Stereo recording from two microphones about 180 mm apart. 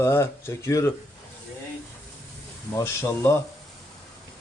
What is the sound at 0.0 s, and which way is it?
Speech, 15° left (ahead or behind).